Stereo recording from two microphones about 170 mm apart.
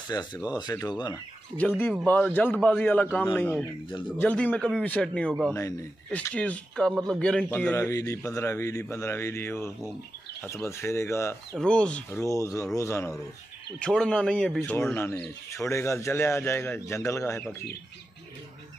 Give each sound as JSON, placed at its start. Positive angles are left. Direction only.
{"t": 0.1, "sound": "speech", "side_deg": 20}
{"t": 2.0, "sound": "a man's voice", "side_deg": 10}
{"t": 11.5, "sound": "a man's voice", "side_deg": 5}